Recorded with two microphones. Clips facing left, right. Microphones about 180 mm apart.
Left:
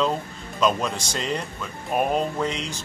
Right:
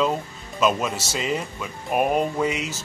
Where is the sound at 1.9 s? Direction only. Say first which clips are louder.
Right 2 dB; 10° right (ahead or behind).